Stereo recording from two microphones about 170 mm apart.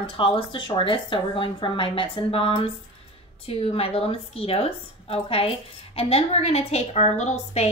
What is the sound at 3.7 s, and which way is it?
A woman's voice, 35° left (ahead or behind).